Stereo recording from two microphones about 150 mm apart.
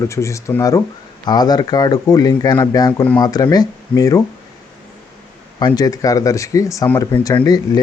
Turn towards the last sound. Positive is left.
turn(degrees=25)  # may be behind; listen again after turning